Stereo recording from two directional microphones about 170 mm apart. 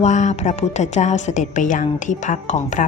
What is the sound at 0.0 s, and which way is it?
A woman's voice, 45° left (ahead or behind).